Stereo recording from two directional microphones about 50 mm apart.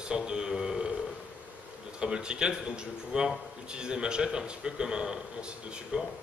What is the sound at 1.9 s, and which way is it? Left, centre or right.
Speech, centre.